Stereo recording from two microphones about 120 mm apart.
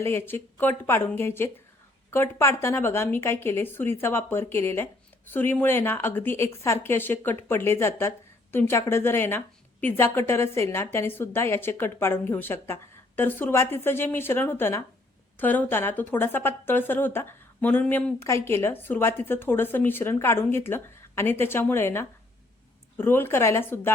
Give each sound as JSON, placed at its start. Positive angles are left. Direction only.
{"t": 0.0, "sound": "a woman's voice", "side_deg": 20}